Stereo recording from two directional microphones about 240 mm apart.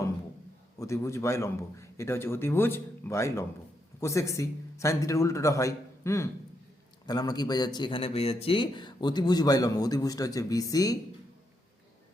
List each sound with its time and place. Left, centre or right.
0.8 s a man's voice: centre